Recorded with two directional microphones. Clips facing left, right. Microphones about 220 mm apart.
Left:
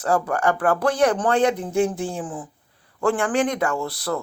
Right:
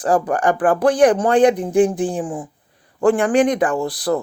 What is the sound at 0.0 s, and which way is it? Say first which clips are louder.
Speech: right 4 dB; 15° right (ahead or behind).